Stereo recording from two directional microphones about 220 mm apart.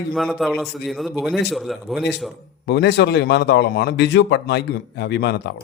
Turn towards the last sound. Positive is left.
turn(degrees=50)  # may be behind; listen again after turning